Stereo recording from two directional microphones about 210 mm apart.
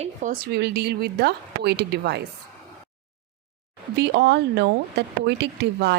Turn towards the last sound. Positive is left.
turn(degrees=-55)  # may be behind; listen again after turning